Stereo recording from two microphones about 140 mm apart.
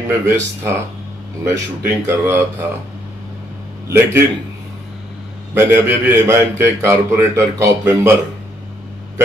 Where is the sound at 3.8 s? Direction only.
20° right (ahead or behind).